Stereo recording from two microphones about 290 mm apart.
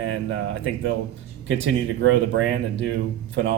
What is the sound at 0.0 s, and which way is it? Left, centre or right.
Speech, right.